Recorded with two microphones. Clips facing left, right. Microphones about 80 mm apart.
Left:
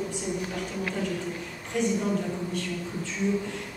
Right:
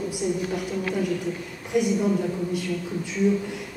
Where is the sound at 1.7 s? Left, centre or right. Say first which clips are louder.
Right 4 dB; centre.